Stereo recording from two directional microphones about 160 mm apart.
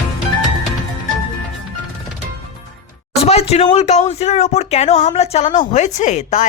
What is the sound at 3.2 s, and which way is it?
Speech, 40° left (ahead or behind).